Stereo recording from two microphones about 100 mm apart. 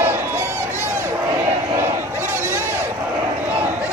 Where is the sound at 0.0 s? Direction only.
20° right (ahead or behind).